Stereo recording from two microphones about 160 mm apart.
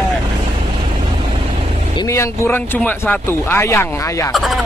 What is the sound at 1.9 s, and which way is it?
Speech, 20° left (ahead or behind).